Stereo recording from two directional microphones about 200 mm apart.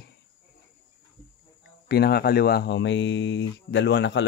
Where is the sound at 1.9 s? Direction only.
55° left (ahead or behind).